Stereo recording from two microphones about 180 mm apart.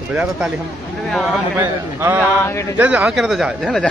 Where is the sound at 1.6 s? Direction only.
10° right (ahead or behind).